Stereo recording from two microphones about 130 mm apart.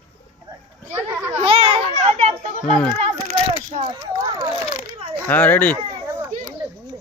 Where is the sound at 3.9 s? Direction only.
30° right (ahead or behind).